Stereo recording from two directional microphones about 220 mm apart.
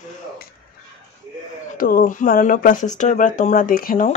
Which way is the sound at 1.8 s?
40° left (ahead or behind).